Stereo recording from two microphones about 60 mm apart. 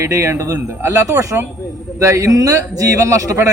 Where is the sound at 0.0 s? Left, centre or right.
Right.